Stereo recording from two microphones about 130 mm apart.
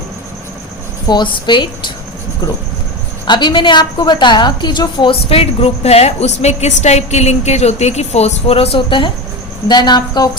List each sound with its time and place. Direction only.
1.0 s speech: 35° left (ahead or behind)
3.2 s a woman's voice: 35° left (ahead or behind)